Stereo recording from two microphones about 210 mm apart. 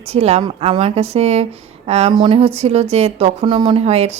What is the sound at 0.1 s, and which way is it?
Speech, 30° right (ahead or behind).